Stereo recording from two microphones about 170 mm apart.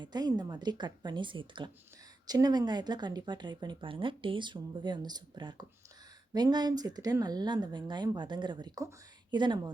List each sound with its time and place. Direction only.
0.0 s speech: 25° right (ahead or behind)